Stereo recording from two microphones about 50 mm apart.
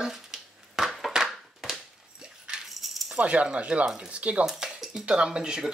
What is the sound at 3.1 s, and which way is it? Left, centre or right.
Speech, right.